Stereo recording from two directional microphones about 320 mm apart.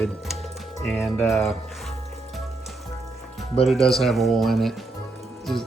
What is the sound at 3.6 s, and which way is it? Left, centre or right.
Speech, centre.